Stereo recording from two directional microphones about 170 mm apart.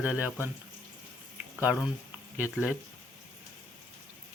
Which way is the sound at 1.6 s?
5° right (ahead or behind).